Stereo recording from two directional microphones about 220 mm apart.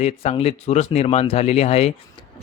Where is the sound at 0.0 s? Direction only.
25° left (ahead or behind).